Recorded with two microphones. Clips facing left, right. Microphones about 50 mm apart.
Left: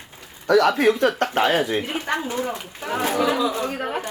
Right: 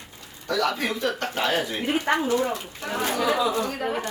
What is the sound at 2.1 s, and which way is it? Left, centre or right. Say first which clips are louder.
Speech: right 2 dB; right.